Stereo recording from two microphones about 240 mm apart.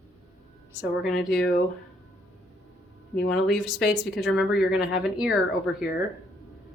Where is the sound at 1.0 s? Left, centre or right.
Centre.